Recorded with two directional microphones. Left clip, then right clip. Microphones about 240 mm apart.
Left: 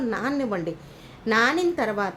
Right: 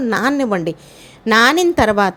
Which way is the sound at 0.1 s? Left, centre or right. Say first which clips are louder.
Right 12 dB; right.